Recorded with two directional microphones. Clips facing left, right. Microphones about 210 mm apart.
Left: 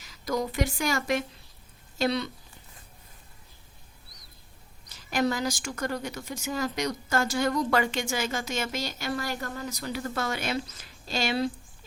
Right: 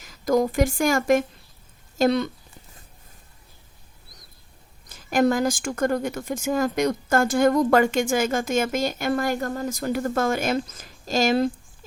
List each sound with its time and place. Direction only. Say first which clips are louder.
0.0 s a woman's voice: right 9 dB; 50° right (ahead or behind)
4.9 s a woman's voice: right 7 dB; 50° right (ahead or behind)